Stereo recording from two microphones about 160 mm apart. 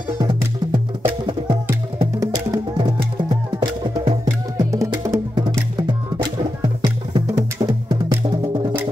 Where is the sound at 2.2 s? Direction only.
25° right (ahead or behind).